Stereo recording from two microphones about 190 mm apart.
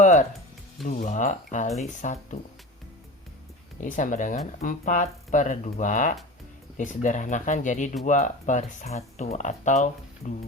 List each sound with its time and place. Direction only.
0.0 s music: 40° left (ahead or behind)
0.9 s speech: 40° left (ahead or behind)
3.8 s speech: 45° left (ahead or behind)